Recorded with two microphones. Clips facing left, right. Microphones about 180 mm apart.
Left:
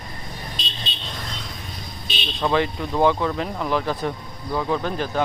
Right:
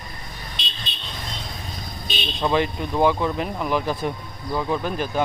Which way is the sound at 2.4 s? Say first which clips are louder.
Even; 15° right (ahead or behind).